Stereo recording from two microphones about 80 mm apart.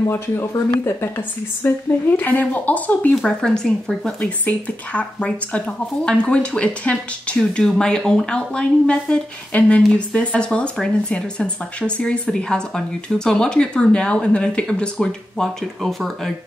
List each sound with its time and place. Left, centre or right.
0.1 s a woman's voice: left
3.3 s speech: centre